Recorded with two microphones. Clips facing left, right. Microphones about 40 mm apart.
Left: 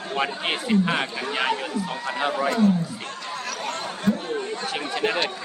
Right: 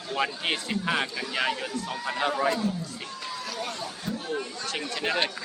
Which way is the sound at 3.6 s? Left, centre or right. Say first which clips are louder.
Left 7 dB; left.